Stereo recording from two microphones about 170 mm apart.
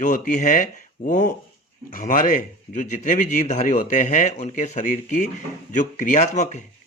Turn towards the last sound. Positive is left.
turn(degrees=40)  # may be behind; listen again after turning